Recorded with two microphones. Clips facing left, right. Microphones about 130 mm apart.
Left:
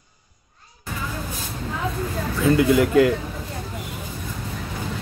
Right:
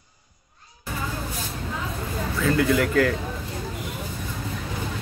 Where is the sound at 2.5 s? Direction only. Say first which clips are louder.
Left 5 dB; 20° left (ahead or behind).